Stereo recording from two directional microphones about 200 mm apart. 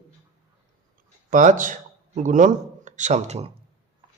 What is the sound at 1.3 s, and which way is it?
A man's voice, 40° right (ahead or behind).